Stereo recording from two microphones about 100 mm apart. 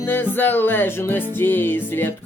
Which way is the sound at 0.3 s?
20° left (ahead or behind).